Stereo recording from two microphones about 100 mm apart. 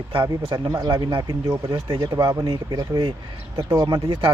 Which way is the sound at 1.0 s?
45° right (ahead or behind).